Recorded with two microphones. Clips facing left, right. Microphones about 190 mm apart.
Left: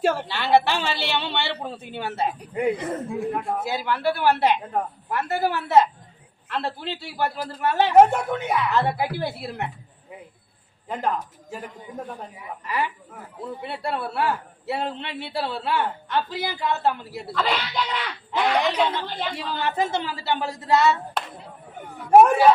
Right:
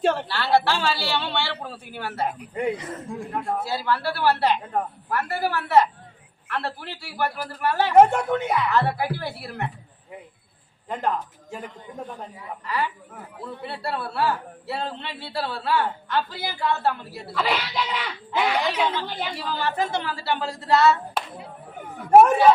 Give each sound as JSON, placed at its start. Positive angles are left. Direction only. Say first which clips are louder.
{"t": 0.0, "sound": "a woman's voice", "louder": "even", "side_deg": 5}
{"t": 0.3, "sound": "a man's voice", "louder": "left 1 dB", "side_deg": 20}
{"t": 2.6, "sound": "a man's voice", "louder": "left 3 dB", "side_deg": 5}
{"t": 3.6, "sound": "a man's voice", "louder": "left 1 dB", "side_deg": 20}
{"t": 7.9, "sound": "a man's voice", "louder": "right 1 dB", "side_deg": 5}
{"t": 8.7, "sound": "a man's voice", "louder": "even", "side_deg": 20}
{"t": 10.8, "sound": "a man's voice", "louder": "even", "side_deg": 0}
{"t": 12.4, "sound": "a man's voice", "louder": "even", "side_deg": 20}
{"t": 17.3, "sound": "a man's voice", "louder": "even", "side_deg": -5}
{"t": 19.6, "sound": "a man's voice", "louder": "left 1 dB", "side_deg": 20}
{"t": 22.2, "sound": "a man's voice", "louder": "even", "side_deg": 5}